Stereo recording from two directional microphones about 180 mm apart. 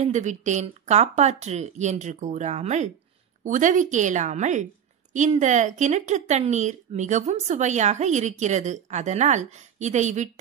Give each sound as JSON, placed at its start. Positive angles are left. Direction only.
{"t": 0.0, "sound": "a woman's voice", "side_deg": -40}